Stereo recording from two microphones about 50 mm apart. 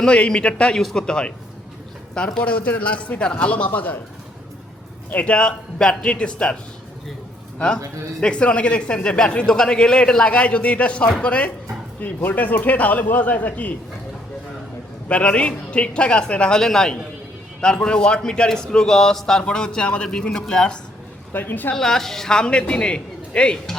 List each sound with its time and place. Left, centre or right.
0.0 s a man's voice: centre
0.8 s speech: centre
1.0 s a man's voice: centre
2.4 s a man's voice: left
5.1 s a man's voice: left
8.2 s a man's voice: left
11.9 s a man's voice: left
15.1 s a man's voice: left
21.3 s a man's voice: left
21.8 s a man's voice: centre